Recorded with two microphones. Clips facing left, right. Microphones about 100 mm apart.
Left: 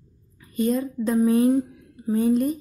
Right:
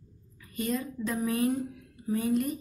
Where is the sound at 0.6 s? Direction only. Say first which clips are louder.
Left 8 dB; 30° left (ahead or behind).